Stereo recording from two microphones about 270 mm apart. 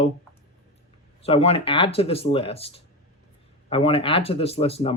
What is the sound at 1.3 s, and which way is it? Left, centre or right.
Speech, left.